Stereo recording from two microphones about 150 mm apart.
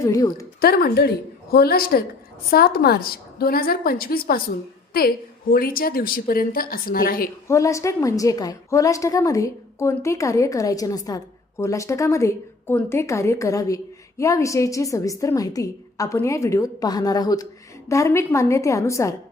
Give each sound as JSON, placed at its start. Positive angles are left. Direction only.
{"t": 0.0, "sound": "a woman's voice", "side_deg": 20}
{"t": 0.6, "sound": "a woman's voice", "side_deg": 90}
{"t": 7.4, "sound": "a woman's voice", "side_deg": 20}